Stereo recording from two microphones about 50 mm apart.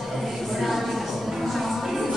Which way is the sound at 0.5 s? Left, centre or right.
Centre.